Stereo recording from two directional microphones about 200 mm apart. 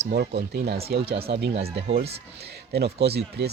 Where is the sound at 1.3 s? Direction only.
55° right (ahead or behind).